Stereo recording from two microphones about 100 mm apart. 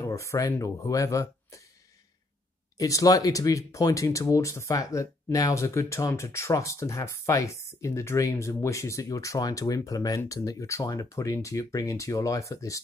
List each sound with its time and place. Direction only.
0.0 s speech: 30° left (ahead or behind)
2.8 s speech: 35° left (ahead or behind)